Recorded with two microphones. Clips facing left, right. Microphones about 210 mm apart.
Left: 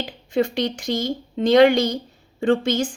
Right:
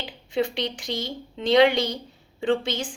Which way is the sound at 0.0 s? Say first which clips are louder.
Left 4 dB; 45° left (ahead or behind).